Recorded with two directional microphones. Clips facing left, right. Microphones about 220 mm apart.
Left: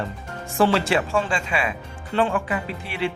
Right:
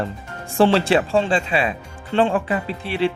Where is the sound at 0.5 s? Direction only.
30° right (ahead or behind).